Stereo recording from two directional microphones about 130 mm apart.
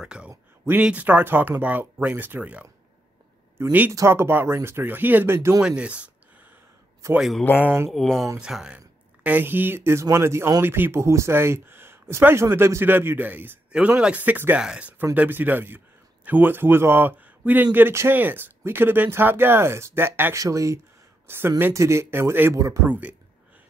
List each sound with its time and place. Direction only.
0.0 s speech: 10° right (ahead or behind)
3.9 s speech: 20° right (ahead or behind)
5.6 s speech: 10° right (ahead or behind)
7.2 s speech: centre (ahead or behind)
7.5 s speech: 15° right (ahead or behind)
7.9 s speech: centre (ahead or behind)